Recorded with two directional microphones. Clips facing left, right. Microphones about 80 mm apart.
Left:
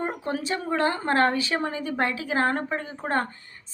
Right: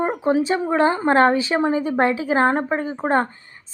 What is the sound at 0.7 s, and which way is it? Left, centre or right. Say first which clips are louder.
A woman's voice: right 5 dB; right.